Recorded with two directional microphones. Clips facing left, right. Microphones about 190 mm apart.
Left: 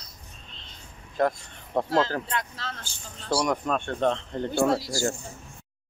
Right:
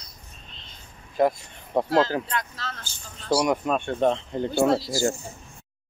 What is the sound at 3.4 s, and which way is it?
Speech, 10° right (ahead or behind).